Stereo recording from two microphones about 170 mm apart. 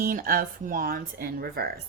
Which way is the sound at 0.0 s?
55° right (ahead or behind).